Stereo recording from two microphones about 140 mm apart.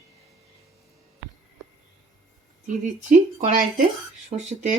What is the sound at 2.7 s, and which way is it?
Speech, 65° right (ahead or behind).